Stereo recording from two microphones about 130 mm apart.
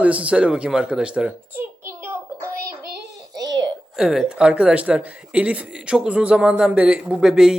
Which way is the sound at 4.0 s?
5° right (ahead or behind).